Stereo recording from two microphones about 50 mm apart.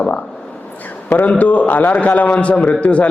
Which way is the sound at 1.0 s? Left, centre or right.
Left.